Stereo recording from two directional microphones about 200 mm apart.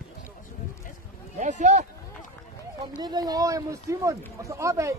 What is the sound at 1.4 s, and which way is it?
Speech, 35° right (ahead or behind).